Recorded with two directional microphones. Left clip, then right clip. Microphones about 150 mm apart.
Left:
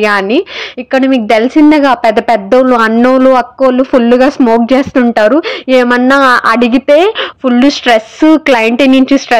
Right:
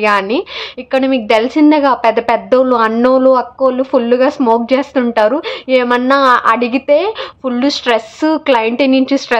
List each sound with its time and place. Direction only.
0.0 s a woman's voice: 30° left (ahead or behind)